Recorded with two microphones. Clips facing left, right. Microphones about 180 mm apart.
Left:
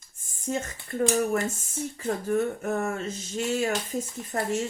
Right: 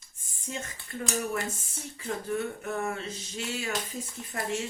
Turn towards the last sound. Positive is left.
turn(degrees=45)  # may be behind; listen again after turning